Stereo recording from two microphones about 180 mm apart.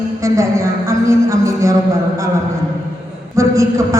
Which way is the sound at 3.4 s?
15° right (ahead or behind).